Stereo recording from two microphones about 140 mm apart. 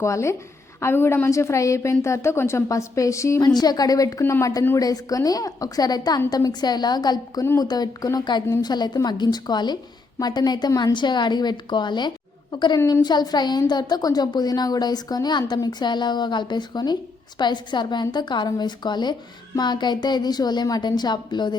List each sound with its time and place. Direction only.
0.0 s a woman's voice: 20° left (ahead or behind)
7.4 s a woman's voice: 20° left (ahead or behind)